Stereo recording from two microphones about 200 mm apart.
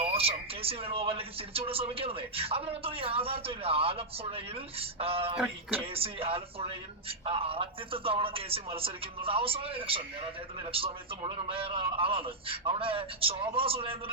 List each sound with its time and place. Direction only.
0.0 s speech: 30° right (ahead or behind)